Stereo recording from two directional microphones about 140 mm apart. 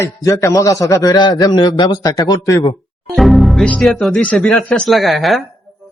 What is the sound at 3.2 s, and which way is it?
Speech, centre (ahead or behind).